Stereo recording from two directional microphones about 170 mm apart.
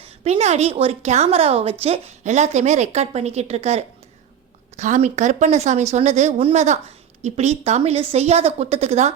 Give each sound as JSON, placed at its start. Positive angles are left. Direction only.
{"t": 0.0, "sound": "a woman's voice", "side_deg": -40}